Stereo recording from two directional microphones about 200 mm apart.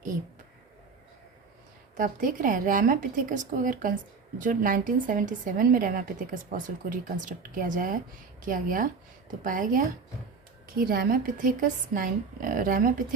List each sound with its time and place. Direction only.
2.0 s a woman's voice: 40° right (ahead or behind)